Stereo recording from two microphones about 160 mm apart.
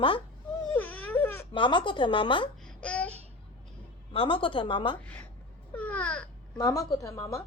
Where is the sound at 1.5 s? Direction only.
30° left (ahead or behind).